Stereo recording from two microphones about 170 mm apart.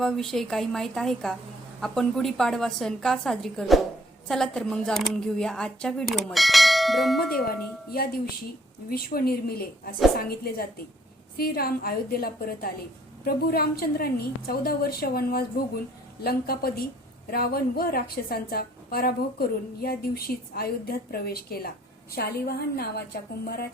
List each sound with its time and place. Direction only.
0.0 s speech: centre (ahead or behind)
8.9 s a woman's voice: 60° left (ahead or behind)